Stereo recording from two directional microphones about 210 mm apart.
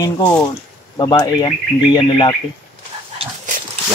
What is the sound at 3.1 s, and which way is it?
Dog, 30° right (ahead or behind).